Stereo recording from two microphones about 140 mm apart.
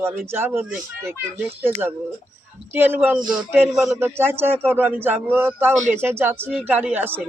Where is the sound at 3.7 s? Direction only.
5° right (ahead or behind).